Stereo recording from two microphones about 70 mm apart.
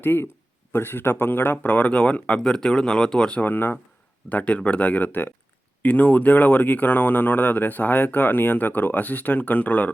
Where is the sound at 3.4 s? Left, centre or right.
Left.